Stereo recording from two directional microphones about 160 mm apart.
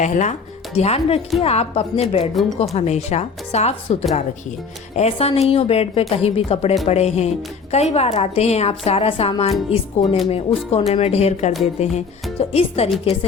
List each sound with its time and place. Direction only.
0.0 s a woman's voice: 45° left (ahead or behind)
4.9 s a woman's voice: 40° left (ahead or behind)